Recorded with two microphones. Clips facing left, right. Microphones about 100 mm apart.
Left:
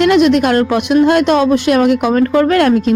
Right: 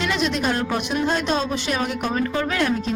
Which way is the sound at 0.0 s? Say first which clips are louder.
Left 13 dB; 60° left (ahead or behind).